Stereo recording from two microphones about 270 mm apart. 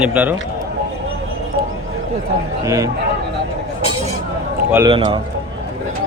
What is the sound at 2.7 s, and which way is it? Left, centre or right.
Speech, centre.